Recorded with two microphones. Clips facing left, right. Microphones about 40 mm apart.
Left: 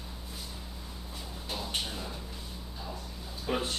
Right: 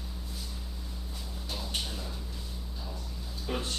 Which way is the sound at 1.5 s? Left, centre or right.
Centre.